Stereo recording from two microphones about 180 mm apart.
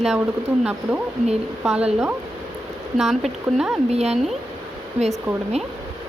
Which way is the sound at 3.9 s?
35° right (ahead or behind).